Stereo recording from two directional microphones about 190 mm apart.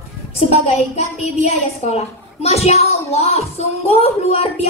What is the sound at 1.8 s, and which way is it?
Speech, 35° left (ahead or behind).